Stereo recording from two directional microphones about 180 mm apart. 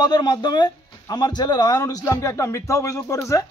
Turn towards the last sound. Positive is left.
turn(degrees=15)  # may be behind; listen again after turning